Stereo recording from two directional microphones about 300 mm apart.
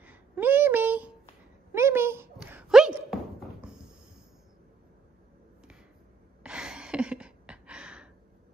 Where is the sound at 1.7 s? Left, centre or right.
Centre.